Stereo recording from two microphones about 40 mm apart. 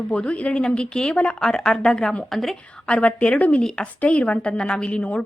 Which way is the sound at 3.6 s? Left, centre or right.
Centre.